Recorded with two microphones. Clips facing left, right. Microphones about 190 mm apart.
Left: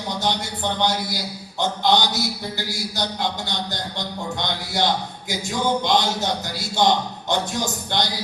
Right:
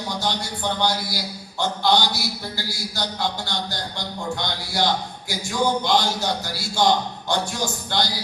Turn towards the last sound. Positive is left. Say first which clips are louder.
# left 1 dB
turn(degrees=20)  # may be behind; listen again after turning